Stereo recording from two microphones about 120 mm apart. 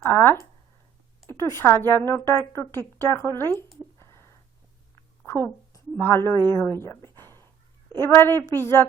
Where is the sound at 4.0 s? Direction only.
25° left (ahead or behind).